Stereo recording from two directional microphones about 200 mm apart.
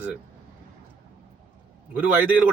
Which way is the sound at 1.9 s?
5° right (ahead or behind).